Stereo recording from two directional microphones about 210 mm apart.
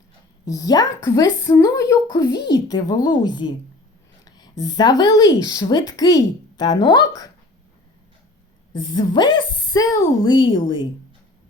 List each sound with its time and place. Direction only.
0.4 s a woman's voice: 15° left (ahead or behind)
8.7 s a woman's voice: 20° left (ahead or behind)